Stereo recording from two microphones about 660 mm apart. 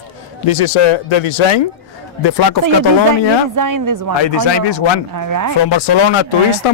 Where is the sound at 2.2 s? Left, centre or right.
Left.